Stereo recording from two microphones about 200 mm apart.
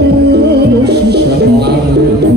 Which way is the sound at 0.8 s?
55° right (ahead or behind).